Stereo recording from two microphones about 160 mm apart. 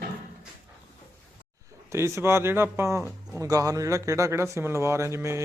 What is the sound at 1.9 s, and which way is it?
Speech, 15° right (ahead or behind).